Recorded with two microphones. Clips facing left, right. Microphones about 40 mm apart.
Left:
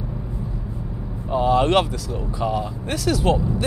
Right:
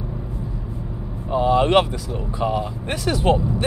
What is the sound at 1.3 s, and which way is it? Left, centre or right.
Speech, centre.